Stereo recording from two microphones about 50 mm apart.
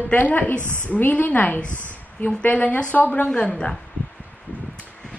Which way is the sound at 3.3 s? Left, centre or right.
Left.